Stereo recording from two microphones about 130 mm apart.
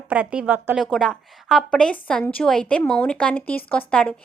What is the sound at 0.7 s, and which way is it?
A woman's voice, centre (ahead or behind).